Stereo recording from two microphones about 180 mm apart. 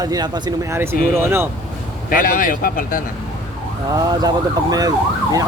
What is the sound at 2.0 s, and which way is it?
Speech, 50° left (ahead or behind).